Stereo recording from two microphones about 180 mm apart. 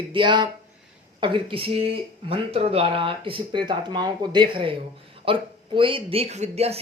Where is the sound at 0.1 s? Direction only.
25° right (ahead or behind).